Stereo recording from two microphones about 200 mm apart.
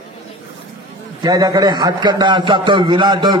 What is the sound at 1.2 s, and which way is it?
A man's voice, 20° right (ahead or behind).